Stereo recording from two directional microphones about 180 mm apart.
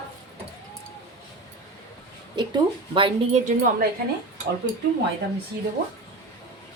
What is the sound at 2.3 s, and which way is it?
Speech, 25° right (ahead or behind).